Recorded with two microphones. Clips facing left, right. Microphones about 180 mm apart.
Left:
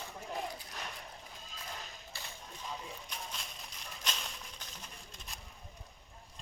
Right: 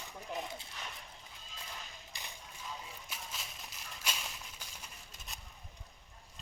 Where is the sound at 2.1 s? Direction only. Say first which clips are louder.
Left 1 dB; 15° right (ahead or behind).